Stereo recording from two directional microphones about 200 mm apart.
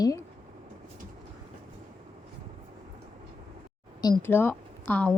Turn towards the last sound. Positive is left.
turn(degrees=5)  # may be behind; listen again after turning